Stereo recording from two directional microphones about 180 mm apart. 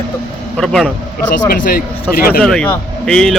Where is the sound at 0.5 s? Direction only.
5° left (ahead or behind).